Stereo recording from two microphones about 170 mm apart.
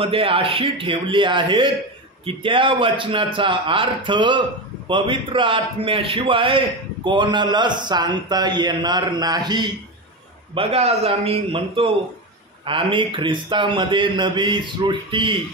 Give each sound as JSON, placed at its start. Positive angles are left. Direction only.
{"t": 0.0, "sound": "a man's voice", "side_deg": -30}